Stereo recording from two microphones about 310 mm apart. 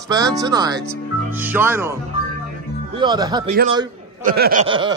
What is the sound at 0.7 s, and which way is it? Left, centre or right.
Speech, centre.